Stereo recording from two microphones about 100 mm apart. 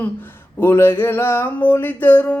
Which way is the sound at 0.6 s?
25° left (ahead or behind).